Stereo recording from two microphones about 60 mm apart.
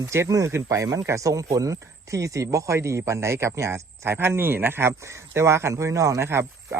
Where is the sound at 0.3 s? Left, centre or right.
Right.